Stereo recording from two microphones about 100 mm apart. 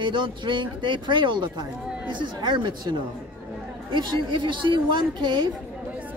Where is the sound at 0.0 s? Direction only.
50° right (ahead or behind).